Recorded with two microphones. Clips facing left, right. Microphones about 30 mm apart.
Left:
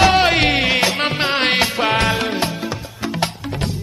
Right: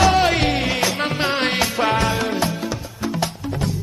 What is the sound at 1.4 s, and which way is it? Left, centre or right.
Music, left.